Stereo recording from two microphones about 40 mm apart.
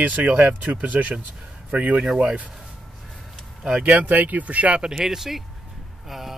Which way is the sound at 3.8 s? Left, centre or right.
Right.